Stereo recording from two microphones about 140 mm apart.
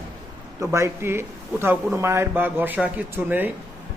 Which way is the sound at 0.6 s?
20° right (ahead or behind).